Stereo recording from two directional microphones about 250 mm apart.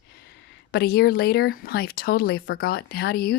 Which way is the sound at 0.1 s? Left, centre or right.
Left.